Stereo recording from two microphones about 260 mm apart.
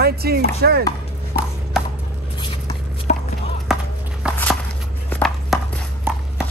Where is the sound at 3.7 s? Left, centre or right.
Centre.